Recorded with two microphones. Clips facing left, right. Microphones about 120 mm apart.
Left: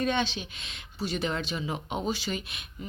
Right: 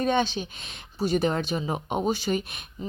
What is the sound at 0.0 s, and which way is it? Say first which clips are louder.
A child's voice: right 4 dB; 40° right (ahead or behind).